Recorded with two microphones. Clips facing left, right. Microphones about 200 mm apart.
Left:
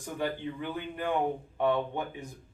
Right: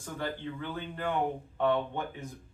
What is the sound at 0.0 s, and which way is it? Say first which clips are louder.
Speech: left 3 dB; 15° left (ahead or behind).